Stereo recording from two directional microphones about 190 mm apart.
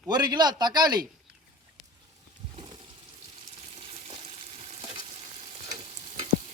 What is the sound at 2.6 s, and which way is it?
Water, 25° right (ahead or behind).